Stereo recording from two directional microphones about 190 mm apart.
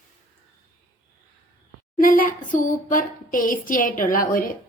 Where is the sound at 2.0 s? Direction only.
45° left (ahead or behind).